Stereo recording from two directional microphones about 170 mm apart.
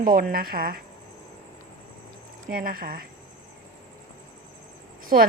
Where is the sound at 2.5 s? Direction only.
60° right (ahead or behind).